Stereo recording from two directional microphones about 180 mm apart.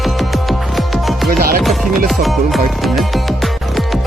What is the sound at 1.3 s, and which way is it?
Music, 55° right (ahead or behind).